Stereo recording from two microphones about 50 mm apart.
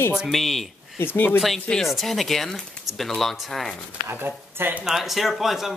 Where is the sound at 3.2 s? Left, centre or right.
Centre.